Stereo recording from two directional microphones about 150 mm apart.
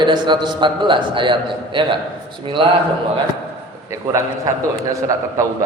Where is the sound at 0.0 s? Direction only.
30° right (ahead or behind).